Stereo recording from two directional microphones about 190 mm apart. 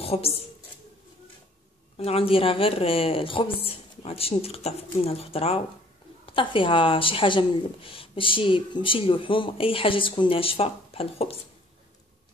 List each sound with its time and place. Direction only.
0.0 s a woman's voice: 30° left (ahead or behind)
2.0 s speech: 30° left (ahead or behind)